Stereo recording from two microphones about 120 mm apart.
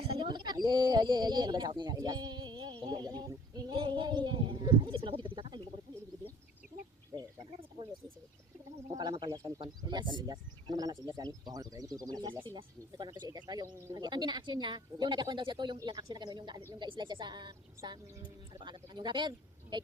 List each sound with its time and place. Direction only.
0.2 s speech: 40° right (ahead or behind)
8.9 s speech: 40° right (ahead or behind)
9.6 s speech: 40° right (ahead or behind)